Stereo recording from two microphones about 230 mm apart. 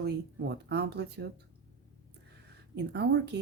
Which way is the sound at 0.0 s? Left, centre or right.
Right.